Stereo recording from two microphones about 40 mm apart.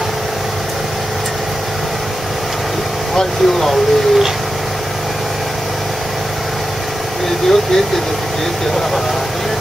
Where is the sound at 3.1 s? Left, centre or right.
Centre.